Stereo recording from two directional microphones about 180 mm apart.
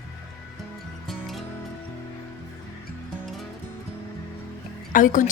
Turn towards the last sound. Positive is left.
turn(degrees=45)  # may be behind; listen again after turning